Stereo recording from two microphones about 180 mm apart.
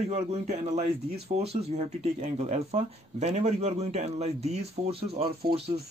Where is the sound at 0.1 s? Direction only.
35° right (ahead or behind).